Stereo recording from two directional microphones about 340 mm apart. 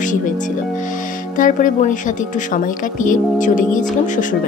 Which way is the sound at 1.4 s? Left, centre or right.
Left.